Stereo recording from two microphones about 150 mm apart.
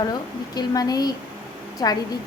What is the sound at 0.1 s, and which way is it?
A woman's voice, 25° left (ahead or behind).